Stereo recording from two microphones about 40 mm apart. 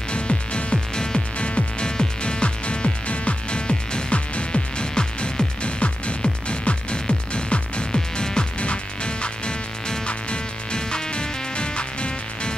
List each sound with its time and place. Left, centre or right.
0.1 s music: left